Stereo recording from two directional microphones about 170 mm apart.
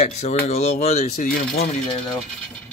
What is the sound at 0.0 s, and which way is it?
Speech, 40° left (ahead or behind).